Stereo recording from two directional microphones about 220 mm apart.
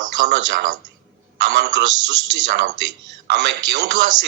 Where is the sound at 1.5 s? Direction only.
50° right (ahead or behind).